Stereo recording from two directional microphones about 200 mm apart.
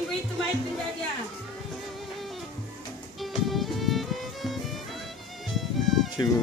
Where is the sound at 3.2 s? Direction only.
Centre (ahead or behind).